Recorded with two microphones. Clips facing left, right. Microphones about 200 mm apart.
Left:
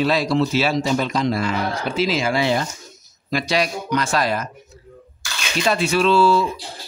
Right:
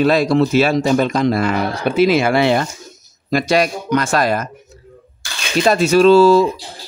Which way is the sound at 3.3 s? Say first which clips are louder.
Right 6 dB; 50° right (ahead or behind).